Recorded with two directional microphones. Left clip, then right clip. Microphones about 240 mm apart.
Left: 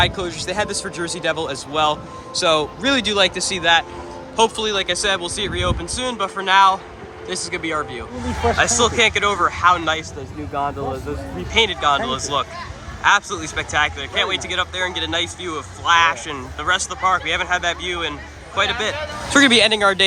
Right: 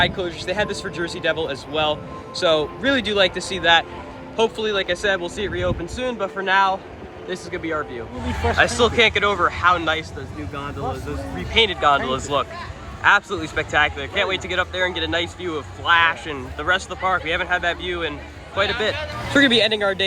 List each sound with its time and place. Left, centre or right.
0.0 s speech: centre
10.5 s speech: left
10.9 s speech: centre
19.3 s speech: centre